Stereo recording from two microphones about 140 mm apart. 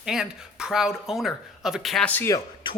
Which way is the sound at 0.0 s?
5° right (ahead or behind).